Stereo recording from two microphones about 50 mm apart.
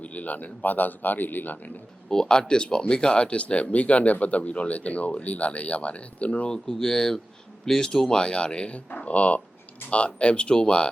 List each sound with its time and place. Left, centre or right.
0.0 s speech: left
2.0 s speech: centre
6.5 s speech: centre